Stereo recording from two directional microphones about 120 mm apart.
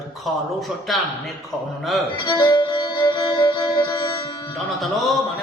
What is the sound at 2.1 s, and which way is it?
Music, 40° left (ahead or behind).